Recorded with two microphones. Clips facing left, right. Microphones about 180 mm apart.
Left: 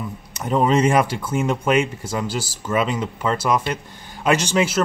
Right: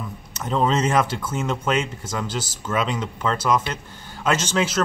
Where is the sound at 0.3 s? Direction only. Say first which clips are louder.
Left 3 dB; 10° left (ahead or behind).